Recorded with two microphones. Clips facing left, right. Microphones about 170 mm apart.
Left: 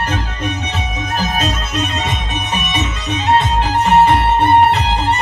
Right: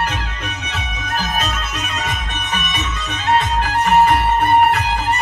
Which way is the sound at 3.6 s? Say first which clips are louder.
Left 2 dB; 25° left (ahead or behind).